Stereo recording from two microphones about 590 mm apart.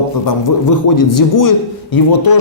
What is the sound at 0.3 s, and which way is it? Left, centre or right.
A man's voice, left.